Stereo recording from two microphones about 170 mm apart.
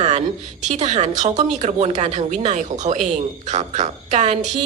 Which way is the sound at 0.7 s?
40° right (ahead or behind).